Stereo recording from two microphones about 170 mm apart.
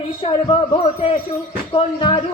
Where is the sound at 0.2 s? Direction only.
35° left (ahead or behind).